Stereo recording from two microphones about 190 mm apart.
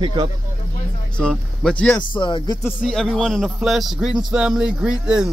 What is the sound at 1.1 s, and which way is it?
Speech, 5° left (ahead or behind).